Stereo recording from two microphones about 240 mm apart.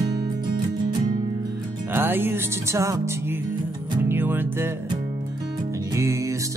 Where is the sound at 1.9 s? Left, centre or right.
Centre.